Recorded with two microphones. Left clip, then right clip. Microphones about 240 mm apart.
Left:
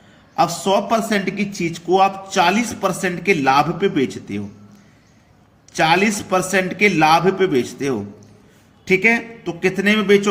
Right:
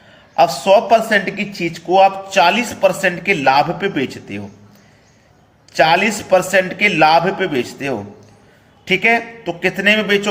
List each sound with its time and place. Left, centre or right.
0.3 s speech: centre
5.7 s speech: centre